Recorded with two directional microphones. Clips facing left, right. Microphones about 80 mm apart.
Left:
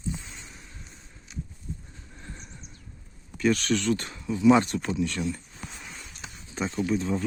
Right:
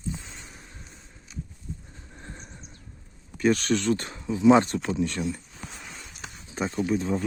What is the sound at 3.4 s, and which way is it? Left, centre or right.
Speech, right.